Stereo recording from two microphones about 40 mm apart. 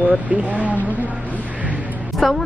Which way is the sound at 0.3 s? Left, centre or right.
Right.